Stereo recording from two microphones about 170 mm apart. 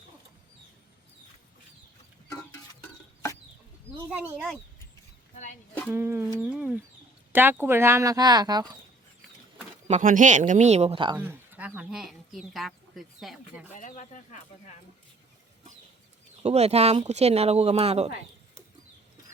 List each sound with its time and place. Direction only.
5.3 s a sound: 45° left (ahead or behind)
5.9 s bird: 15° right (ahead or behind)
7.3 s speech: 10° right (ahead or behind)
10.0 s speech: 50° right (ahead or behind); by 11.2 s 30° right (ahead or behind)
11.2 s speech: 10° right (ahead or behind)
13.7 s speech: 45° left (ahead or behind)
16.4 s speech: 40° right (ahead or behind)